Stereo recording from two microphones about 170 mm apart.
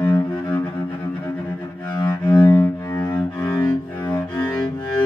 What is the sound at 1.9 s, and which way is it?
Cello, 25° left (ahead or behind).